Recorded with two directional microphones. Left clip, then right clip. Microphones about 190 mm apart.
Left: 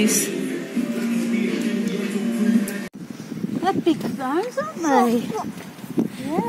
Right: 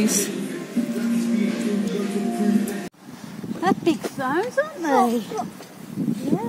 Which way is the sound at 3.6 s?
30° left (ahead or behind).